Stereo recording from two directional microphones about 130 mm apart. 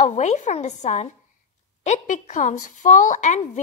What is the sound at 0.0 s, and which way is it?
A woman's voice, 65° left (ahead or behind).